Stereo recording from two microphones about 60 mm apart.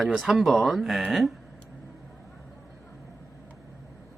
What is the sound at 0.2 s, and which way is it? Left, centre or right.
A man's voice, centre.